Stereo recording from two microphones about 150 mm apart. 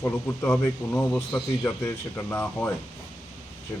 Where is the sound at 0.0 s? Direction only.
15° left (ahead or behind).